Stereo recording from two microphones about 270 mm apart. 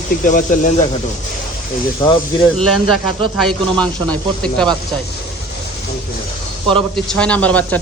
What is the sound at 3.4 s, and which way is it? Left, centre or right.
A man's voice, centre.